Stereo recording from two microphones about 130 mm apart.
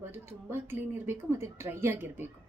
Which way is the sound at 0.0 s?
15° right (ahead or behind).